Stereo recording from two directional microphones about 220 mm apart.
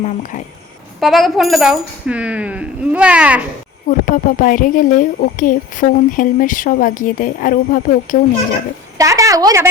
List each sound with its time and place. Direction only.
0.9 s speech: centre (ahead or behind)
3.8 s speech: 40° left (ahead or behind)
9.0 s a woman's voice: 15° right (ahead or behind)